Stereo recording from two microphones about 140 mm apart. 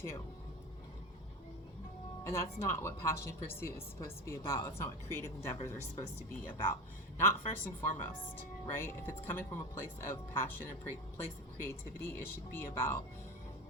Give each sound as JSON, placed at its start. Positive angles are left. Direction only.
{"t": 2.2, "sound": "a woman's voice", "side_deg": 20}